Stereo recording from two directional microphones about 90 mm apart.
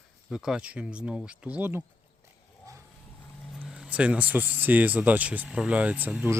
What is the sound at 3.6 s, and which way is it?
Speech, 5° right (ahead or behind).